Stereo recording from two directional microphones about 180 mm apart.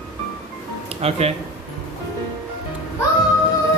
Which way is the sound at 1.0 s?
35° right (ahead or behind).